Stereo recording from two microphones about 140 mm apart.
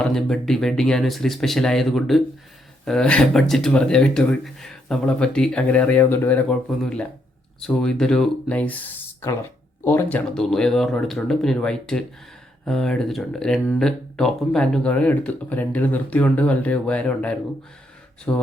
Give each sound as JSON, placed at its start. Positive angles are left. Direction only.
{"t": 0.0, "sound": "speech", "side_deg": 5}
{"t": 6.7, "sound": "speech", "side_deg": 0}